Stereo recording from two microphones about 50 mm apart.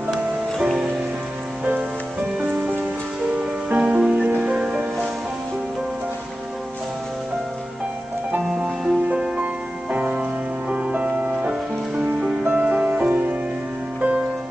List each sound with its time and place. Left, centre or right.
0.6 s music: centre
3.3 s music: centre
8.6 s music: centre